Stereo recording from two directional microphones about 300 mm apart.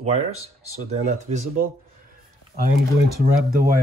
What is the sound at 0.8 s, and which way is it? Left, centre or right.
Speech, right.